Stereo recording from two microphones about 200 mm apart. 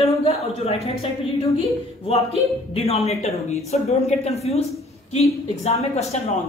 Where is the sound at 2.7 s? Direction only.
30° left (ahead or behind).